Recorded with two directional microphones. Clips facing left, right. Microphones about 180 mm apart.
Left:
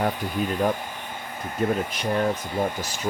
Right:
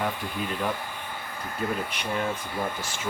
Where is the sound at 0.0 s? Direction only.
40° left (ahead or behind).